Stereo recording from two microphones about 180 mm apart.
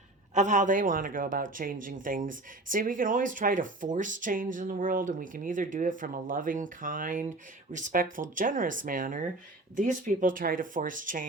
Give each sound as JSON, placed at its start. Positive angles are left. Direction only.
{"t": 0.3, "sound": "speech", "side_deg": -45}